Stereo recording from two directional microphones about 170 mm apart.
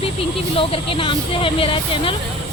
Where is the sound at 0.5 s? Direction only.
30° left (ahead or behind).